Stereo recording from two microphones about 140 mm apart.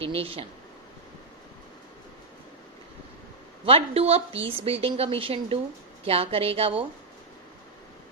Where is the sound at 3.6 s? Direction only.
45° right (ahead or behind).